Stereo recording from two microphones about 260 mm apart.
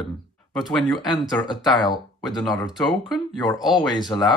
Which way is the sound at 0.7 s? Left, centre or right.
Centre.